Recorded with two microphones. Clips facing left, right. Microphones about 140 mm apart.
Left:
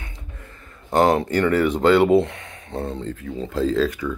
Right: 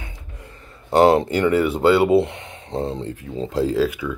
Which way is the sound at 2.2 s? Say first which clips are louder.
Right 2 dB; 20° right (ahead or behind).